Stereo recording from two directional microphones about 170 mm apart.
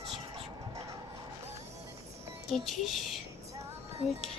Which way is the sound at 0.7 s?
20° right (ahead or behind).